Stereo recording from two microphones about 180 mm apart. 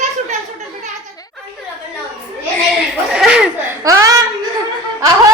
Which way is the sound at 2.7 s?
5° right (ahead or behind).